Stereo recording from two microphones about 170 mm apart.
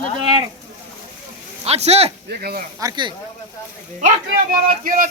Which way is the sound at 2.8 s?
25° right (ahead or behind).